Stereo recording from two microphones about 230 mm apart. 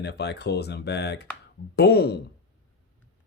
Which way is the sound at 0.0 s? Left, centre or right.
Left.